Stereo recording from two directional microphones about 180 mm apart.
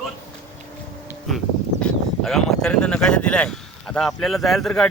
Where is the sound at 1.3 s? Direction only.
Centre (ahead or behind).